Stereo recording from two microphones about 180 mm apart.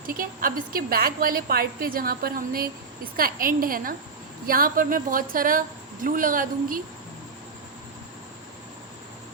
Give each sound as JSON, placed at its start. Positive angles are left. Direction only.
{"t": 0.0, "sound": "a woman's voice", "side_deg": -55}